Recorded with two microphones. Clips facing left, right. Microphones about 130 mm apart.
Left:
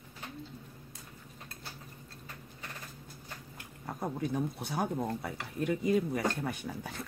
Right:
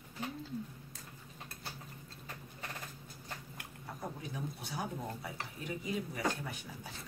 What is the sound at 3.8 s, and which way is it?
Speech, 55° left (ahead or behind).